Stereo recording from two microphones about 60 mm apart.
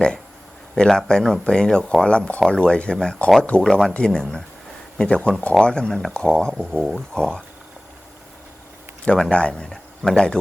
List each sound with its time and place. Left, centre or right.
0.8 s speech: centre
2.0 s speech: centre
6.5 s speech: centre
6.9 s speech: centre
9.0 s speech: centre